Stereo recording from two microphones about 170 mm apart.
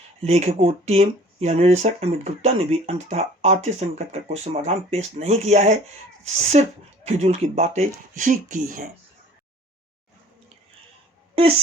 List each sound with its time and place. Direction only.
0.2 s speech: 40° right (ahead or behind)